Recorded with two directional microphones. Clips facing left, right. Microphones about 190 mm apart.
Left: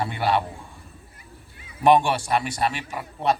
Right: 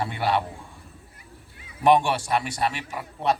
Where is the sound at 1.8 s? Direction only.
35° left (ahead or behind).